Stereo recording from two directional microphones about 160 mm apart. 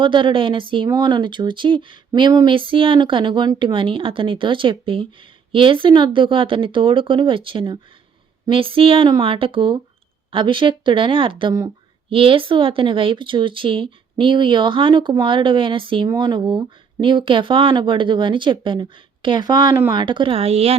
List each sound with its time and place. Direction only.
0.0 s speech: 30° right (ahead or behind)